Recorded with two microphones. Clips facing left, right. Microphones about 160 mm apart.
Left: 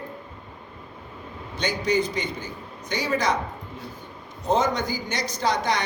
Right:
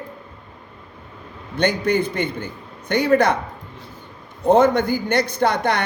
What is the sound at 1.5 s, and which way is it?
A man's voice, 55° right (ahead or behind).